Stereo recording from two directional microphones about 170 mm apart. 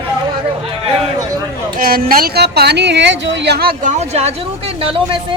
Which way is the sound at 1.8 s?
60° right (ahead or behind).